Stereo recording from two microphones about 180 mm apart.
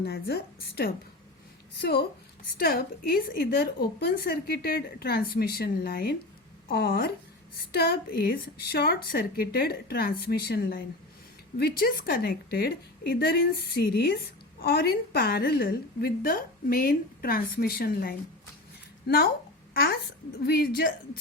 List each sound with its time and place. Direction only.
0.0 s a woman's voice: 65° left (ahead or behind)